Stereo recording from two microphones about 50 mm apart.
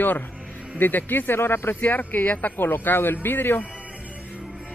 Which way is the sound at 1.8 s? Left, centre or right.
Left.